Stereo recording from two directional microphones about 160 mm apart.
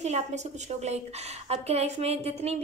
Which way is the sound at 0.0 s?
45° right (ahead or behind).